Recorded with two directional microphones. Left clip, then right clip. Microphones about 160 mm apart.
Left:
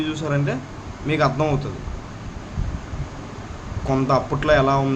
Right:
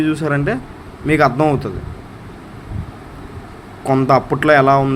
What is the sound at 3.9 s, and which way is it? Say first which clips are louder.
Speech: right 6 dB; 40° right (ahead or behind).